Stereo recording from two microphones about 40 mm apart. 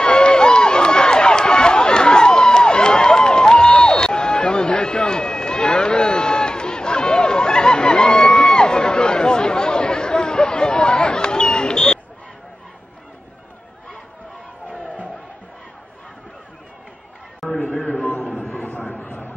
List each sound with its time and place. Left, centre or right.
0.0 s run: left
8.2 s music: centre
8.6 s chatter: left
17.6 s a sound: left